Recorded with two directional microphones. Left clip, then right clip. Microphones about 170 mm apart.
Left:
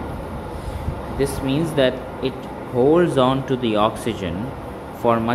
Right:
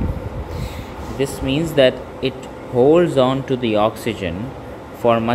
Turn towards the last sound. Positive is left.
turn(degrees=-10)  # may be behind; listen again after turning